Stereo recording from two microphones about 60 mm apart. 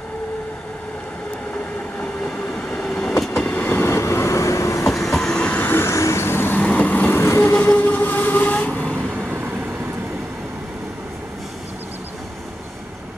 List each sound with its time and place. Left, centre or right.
2.8 s train: centre
3.9 s vehicle: left
5.0 s train: centre
5.4 s vehicle: left
5.9 s vehicle: left
6.6 s vehicle: left
7.2 s train: left
7.7 s vehicle: left